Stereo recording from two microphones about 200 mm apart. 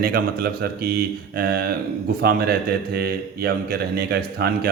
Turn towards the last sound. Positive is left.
turn(degrees=-50)  # may be behind; listen again after turning